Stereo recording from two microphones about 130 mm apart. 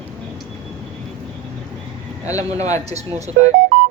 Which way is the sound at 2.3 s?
25° left (ahead or behind).